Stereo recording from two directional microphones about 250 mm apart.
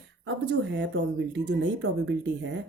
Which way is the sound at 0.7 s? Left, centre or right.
Right.